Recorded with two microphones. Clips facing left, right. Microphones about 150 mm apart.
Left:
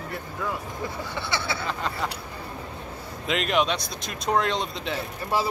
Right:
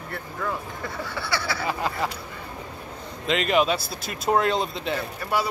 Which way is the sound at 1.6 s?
5° right (ahead or behind).